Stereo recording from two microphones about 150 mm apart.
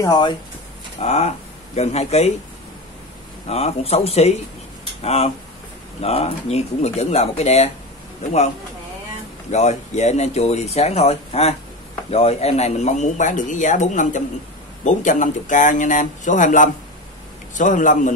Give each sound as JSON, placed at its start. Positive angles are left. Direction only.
{"t": 0.0, "sound": "speech", "side_deg": 30}
{"t": 1.0, "sound": "speech", "side_deg": 45}
{"t": 3.4, "sound": "speech", "side_deg": 45}
{"t": 9.5, "sound": "speech", "side_deg": 50}